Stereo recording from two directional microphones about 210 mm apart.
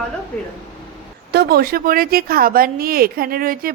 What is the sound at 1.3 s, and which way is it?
Speech, 50° right (ahead or behind).